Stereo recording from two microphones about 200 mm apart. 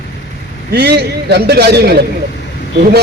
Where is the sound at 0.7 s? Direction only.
55° right (ahead or behind).